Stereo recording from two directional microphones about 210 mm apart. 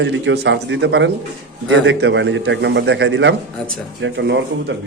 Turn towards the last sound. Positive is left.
turn(degrees=-55)  # may be behind; listen again after turning